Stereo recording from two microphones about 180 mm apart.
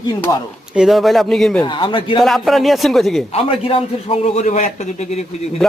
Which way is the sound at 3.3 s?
30° left (ahead or behind).